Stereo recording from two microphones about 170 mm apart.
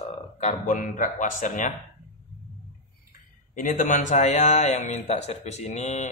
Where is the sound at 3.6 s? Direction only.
50° left (ahead or behind).